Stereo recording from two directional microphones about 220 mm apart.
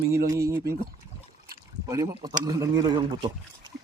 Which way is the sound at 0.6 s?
45° right (ahead or behind).